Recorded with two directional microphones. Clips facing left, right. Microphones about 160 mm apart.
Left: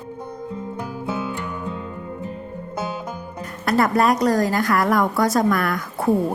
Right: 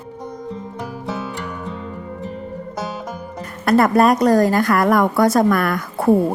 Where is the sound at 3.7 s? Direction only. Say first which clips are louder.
Right 4 dB; 50° right (ahead or behind).